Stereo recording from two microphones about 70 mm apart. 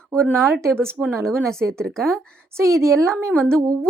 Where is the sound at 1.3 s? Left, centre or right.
Centre.